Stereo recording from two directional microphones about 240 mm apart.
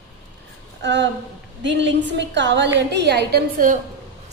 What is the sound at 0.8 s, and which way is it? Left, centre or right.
Speech, right.